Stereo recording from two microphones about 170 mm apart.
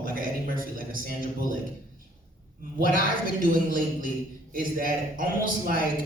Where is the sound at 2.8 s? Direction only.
55° right (ahead or behind).